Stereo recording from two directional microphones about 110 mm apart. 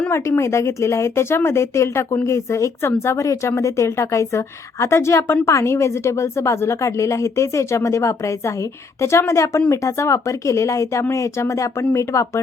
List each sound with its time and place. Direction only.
0.1 s a woman's voice: 25° left (ahead or behind)